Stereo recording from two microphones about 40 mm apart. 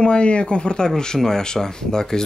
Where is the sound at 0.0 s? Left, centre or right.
Left.